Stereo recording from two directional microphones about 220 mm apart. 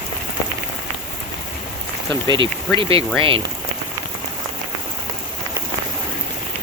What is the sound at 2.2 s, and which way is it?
Speech, 20° right (ahead or behind).